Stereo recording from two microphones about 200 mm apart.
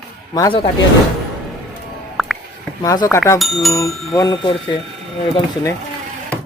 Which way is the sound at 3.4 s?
Centre (ahead or behind).